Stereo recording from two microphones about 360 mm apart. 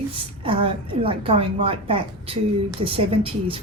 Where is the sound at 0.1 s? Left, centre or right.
Centre.